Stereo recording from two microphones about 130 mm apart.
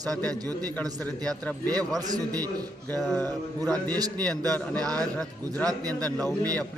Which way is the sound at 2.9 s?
15° left (ahead or behind).